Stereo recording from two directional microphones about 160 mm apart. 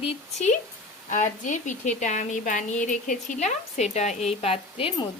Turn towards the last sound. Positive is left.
turn(degrees=35)  # may be behind; listen again after turning